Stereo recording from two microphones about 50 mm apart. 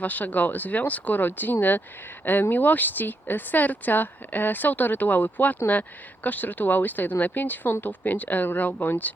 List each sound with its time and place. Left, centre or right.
0.0 s speech: left